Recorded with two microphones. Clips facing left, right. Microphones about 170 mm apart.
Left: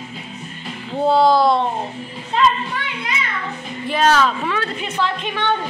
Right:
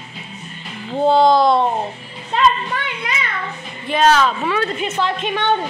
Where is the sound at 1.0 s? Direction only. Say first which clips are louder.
Right 2 dB; 20° right (ahead or behind).